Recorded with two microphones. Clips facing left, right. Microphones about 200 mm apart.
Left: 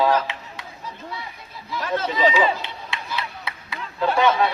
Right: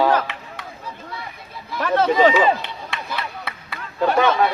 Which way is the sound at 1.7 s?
65° right (ahead or behind).